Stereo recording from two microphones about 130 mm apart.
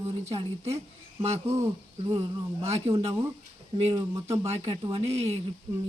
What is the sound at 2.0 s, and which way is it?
Speech, 40° right (ahead or behind).